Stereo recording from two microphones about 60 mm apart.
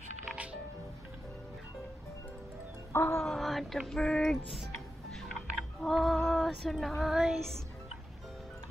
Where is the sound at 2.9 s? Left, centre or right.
Left.